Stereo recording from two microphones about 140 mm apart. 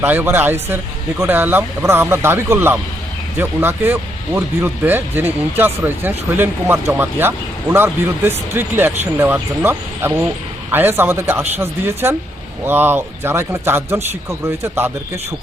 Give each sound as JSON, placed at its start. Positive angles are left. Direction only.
{"t": 0.0, "sound": "speech", "side_deg": -15}